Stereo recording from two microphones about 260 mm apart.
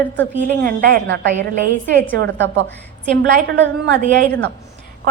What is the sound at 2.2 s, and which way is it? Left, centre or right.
A woman's voice, right.